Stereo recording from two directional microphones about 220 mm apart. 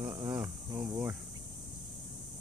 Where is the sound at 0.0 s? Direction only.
15° right (ahead or behind).